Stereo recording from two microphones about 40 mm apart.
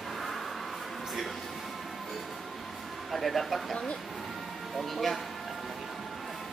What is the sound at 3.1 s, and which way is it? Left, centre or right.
Speech, centre.